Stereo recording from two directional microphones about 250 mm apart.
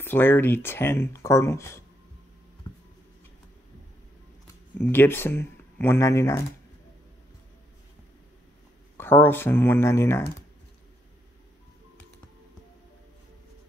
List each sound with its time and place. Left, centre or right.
0.0 s speech: centre
2.6 s a sound: centre
4.7 s speech: centre
8.9 s speech: centre